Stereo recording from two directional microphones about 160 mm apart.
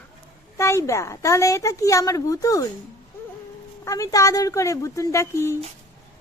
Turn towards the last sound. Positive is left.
turn(degrees=15)  # may be behind; listen again after turning